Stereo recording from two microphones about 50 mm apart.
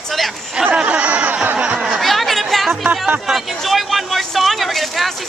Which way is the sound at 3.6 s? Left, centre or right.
Centre.